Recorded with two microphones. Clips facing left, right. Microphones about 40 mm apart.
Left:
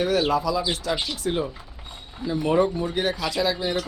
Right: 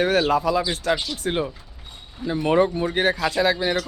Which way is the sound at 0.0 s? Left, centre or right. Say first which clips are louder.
Right 2 dB; right.